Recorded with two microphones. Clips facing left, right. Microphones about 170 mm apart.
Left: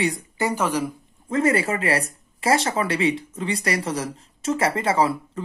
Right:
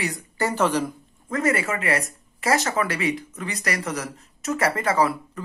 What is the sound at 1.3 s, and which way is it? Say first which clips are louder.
Speech: left 3 dB; 30° left (ahead or behind).